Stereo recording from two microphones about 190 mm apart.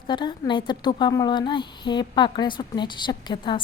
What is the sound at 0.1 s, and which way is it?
A woman's voice, 25° left (ahead or behind).